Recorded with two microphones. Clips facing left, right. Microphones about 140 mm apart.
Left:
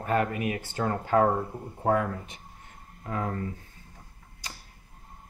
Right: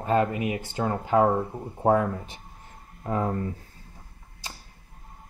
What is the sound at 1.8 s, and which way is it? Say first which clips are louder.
Speech: right 4 dB; 30° right (ahead or behind).